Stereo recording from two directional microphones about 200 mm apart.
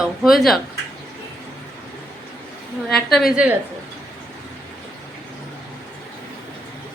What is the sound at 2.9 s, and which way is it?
Speech, centre (ahead or behind).